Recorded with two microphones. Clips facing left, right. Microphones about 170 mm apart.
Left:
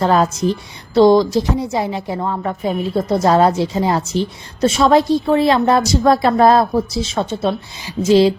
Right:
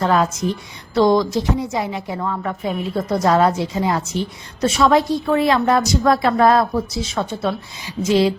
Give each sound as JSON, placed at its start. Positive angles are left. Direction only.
{"t": 0.0, "sound": "a woman's voice", "side_deg": 35}